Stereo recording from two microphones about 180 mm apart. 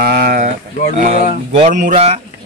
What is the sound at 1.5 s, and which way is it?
Speech, 40° right (ahead or behind).